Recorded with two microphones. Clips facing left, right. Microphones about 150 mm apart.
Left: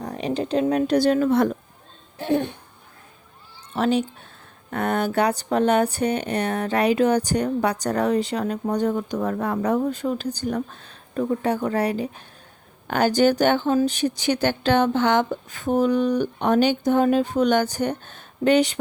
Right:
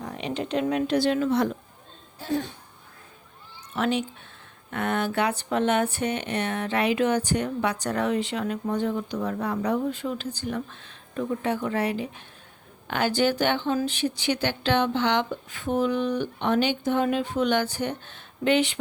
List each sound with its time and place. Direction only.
0.0 s speech: 40° left (ahead or behind)
2.1 s speech: 65° left (ahead or behind)
3.7 s speech: 35° left (ahead or behind)